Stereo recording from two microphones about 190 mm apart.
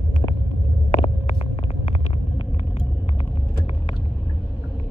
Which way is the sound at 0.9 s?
30° left (ahead or behind).